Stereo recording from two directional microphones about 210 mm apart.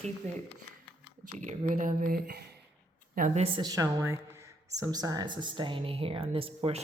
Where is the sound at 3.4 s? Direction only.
20° right (ahead or behind).